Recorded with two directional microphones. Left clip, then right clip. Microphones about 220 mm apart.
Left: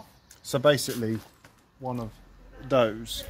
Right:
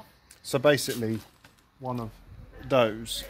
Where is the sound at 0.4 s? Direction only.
10° right (ahead or behind).